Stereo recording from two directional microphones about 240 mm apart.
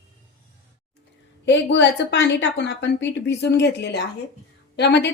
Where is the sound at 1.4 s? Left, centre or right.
Left.